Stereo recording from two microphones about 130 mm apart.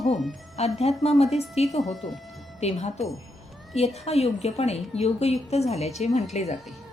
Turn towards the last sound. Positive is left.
turn(degrees=60)  # may be behind; listen again after turning